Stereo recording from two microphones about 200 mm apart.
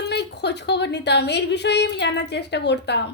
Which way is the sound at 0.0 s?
55° left (ahead or behind).